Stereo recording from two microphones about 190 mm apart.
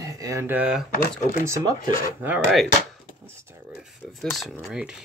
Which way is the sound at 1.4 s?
15° right (ahead or behind).